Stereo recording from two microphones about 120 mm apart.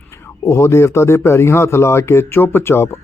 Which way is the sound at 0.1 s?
25° left (ahead or behind).